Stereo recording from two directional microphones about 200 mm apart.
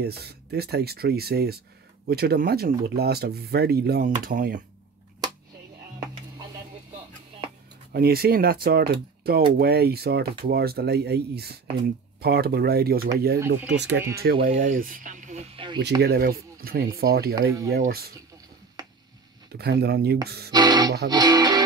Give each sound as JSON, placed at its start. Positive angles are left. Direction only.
{"t": 0.0, "sound": "speech", "side_deg": -55}
{"t": 7.9, "sound": "speech", "side_deg": -50}
{"t": 14.3, "sound": "speech", "side_deg": -25}
{"t": 14.6, "sound": "speech", "side_deg": -45}
{"t": 16.0, "sound": "speech", "side_deg": -50}
{"t": 17.4, "sound": "speech", "side_deg": -15}
{"t": 17.7, "sound": "speech", "side_deg": -50}
{"t": 19.5, "sound": "speech", "side_deg": -55}
{"t": 20.5, "sound": "music", "side_deg": -20}